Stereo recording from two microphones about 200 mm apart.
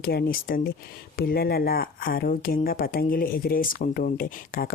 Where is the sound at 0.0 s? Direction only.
50° left (ahead or behind).